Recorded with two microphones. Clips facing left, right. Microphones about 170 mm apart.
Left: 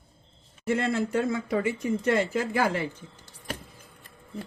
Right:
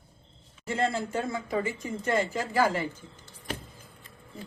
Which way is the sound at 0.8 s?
60° left (ahead or behind).